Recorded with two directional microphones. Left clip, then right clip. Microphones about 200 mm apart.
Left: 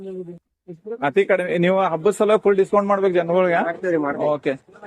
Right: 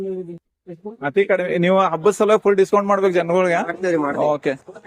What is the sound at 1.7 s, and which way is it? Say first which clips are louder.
Speech: right 5 dB; 15° right (ahead or behind).